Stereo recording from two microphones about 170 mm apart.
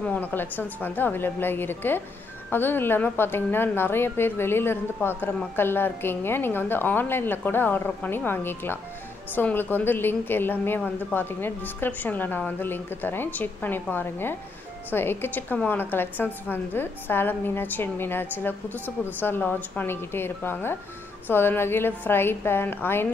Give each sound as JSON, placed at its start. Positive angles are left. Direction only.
{"t": 0.0, "sound": "a woman's voice", "side_deg": 10}